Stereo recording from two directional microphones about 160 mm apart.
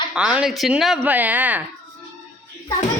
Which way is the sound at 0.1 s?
5° right (ahead or behind).